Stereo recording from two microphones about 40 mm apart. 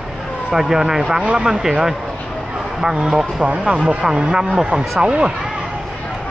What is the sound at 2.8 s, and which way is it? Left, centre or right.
Speech, centre.